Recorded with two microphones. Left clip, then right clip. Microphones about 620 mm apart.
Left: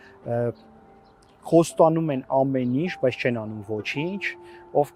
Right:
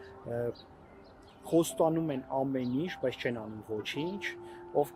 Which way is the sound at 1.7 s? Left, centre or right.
Left.